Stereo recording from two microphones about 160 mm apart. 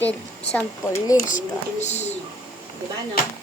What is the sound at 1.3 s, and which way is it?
Speech, 50° left (ahead or behind).